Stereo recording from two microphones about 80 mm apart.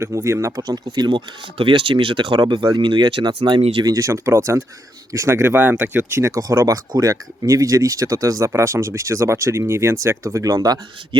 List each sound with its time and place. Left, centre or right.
0.0 s speech: right
0.7 s speech: right
1.6 s speech: right
3.9 s speech: right
6.1 s speech: right